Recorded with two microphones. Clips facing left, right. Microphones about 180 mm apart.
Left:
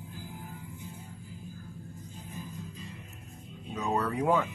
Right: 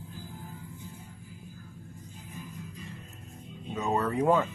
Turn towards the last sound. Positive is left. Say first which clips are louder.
# right 2 dB
turn(degrees=0)  # may be behind; listen again after turning